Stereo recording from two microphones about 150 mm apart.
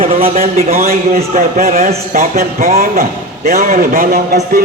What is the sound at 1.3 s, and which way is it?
A man's voice, 65° right (ahead or behind).